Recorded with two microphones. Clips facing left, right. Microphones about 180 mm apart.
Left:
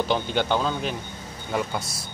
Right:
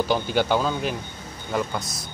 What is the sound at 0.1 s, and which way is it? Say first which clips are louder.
Speech: right 3 dB; 5° right (ahead or behind).